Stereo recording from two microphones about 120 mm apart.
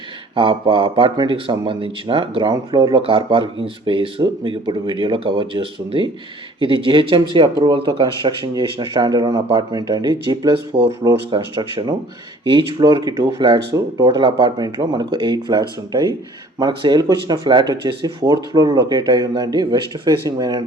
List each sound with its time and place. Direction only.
0.3 s speech: 45° right (ahead or behind)